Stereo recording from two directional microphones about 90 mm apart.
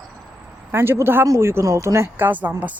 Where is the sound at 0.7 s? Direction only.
30° right (ahead or behind).